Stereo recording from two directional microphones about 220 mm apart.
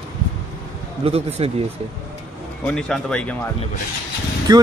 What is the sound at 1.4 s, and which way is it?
Speech, 25° right (ahead or behind).